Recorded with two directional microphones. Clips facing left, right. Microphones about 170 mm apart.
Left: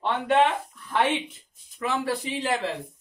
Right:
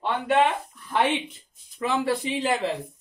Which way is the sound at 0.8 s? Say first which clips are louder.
Right 1 dB; 15° right (ahead or behind).